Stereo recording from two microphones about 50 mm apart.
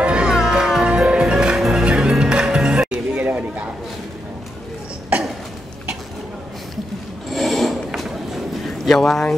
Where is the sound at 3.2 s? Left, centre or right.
Right.